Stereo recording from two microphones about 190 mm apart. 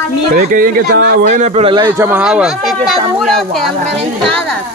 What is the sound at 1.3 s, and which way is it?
Speech, 35° right (ahead or behind).